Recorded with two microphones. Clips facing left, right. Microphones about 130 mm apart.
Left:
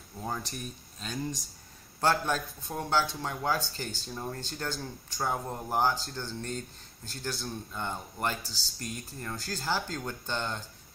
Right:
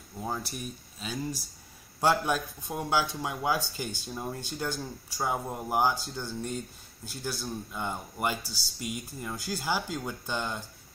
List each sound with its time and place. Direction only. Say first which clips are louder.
0.2 s speech: right 1 dB; 5° right (ahead or behind)